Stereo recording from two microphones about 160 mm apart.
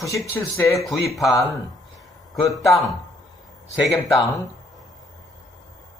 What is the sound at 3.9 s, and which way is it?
Speech, centre (ahead or behind).